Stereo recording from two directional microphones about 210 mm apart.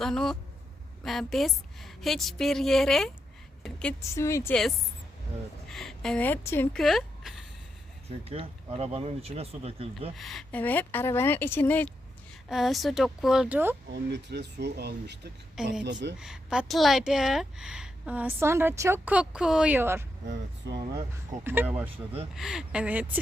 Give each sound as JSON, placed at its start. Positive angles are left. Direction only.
{"t": 0.0, "sound": "speech", "side_deg": 0}
{"t": 5.6, "sound": "speech", "side_deg": 0}
{"t": 8.2, "sound": "speech", "side_deg": -30}
{"t": 10.2, "sound": "speech", "side_deg": 0}
{"t": 12.5, "sound": "speech", "side_deg": 0}
{"t": 13.9, "sound": "a woman's voice", "side_deg": -55}
{"t": 16.1, "sound": "speech", "side_deg": -5}
{"t": 21.4, "sound": "speech", "side_deg": -10}
{"t": 21.9, "sound": "speech", "side_deg": -25}
{"t": 22.4, "sound": "speech", "side_deg": 0}